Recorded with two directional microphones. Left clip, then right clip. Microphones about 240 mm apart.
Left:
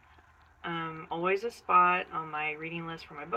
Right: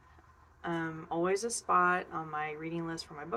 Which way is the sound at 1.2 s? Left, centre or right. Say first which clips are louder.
Left 2 dB; centre.